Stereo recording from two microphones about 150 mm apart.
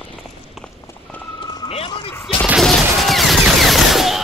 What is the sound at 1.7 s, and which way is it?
Vehicle, 35° left (ahead or behind).